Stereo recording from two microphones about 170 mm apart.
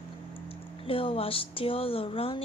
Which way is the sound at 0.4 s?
30° left (ahead or behind).